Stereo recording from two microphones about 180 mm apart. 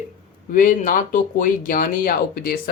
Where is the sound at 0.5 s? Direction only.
50° left (ahead or behind).